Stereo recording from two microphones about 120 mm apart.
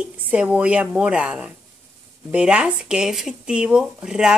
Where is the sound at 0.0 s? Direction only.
10° right (ahead or behind).